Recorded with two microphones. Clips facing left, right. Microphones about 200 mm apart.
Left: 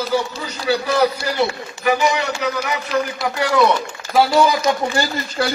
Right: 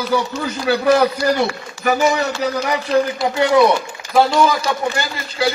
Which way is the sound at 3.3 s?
25° right (ahead or behind).